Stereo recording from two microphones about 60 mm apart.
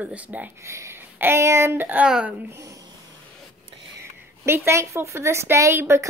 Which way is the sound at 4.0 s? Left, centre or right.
Right.